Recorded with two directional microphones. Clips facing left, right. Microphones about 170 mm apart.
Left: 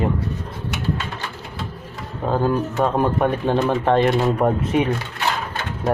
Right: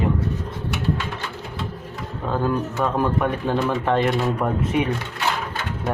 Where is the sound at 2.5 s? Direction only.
25° left (ahead or behind).